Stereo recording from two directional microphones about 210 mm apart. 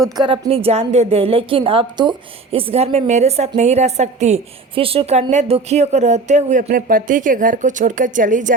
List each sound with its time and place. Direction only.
0.2 s a woman's voice: 25° right (ahead or behind)